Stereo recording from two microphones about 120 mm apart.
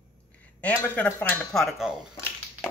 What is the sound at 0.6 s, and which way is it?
Speech, 15° left (ahead or behind).